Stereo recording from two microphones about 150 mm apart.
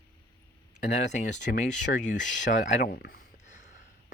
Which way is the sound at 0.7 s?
55° left (ahead or behind).